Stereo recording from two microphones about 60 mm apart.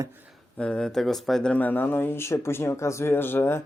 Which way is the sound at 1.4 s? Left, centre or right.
Left.